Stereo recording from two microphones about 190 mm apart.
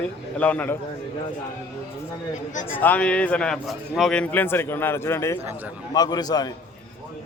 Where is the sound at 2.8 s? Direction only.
10° left (ahead or behind).